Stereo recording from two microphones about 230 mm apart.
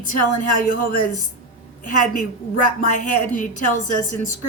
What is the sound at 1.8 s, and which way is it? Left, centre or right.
Speech, left.